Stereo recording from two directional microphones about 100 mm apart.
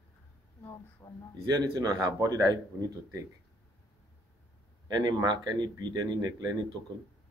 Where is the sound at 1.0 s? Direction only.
35° left (ahead or behind).